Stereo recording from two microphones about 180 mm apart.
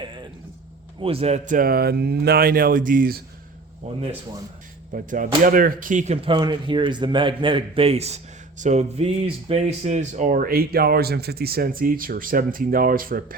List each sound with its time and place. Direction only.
1.0 s a man's voice: 35° right (ahead or behind)
1.5 s speech: 55° right (ahead or behind)
3.8 s a man's voice: 40° right (ahead or behind)
6.2 s a man's voice: 25° right (ahead or behind); by 13.3 s 50° right (ahead or behind)